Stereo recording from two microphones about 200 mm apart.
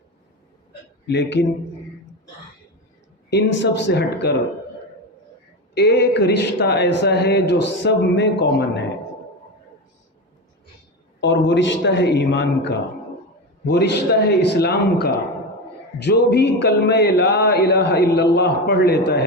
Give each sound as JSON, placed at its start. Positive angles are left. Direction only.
{"t": 1.0, "sound": "a man's voice", "side_deg": 60}
{"t": 3.2, "sound": "a man's voice", "side_deg": 60}
{"t": 5.7, "sound": "a man's voice", "side_deg": 55}
{"t": 11.2, "sound": "a man's voice", "side_deg": 60}